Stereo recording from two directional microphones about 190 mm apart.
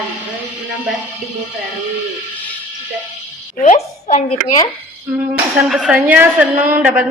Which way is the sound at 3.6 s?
40° left (ahead or behind).